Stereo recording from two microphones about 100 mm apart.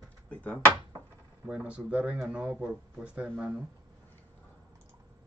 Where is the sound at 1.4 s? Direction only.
10° right (ahead or behind).